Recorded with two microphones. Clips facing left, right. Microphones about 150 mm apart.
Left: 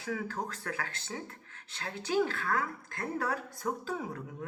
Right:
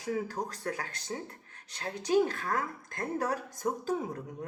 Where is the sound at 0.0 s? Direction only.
40° right (ahead or behind).